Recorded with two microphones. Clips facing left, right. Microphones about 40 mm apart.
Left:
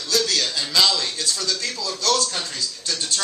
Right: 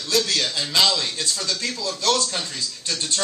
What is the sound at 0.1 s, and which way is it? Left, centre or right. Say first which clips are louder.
A man's voice: even; right.